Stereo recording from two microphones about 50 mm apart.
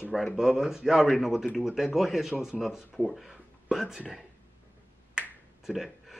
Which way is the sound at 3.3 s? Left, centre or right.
Centre.